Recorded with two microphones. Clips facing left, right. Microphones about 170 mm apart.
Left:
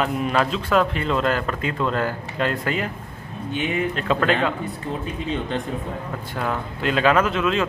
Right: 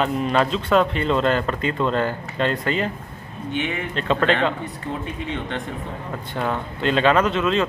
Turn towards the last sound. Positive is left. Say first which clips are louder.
# right 1 dB
turn(degrees=5)  # may be behind; listen again after turning